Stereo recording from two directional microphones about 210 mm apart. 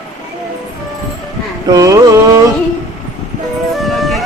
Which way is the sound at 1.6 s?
15° right (ahead or behind).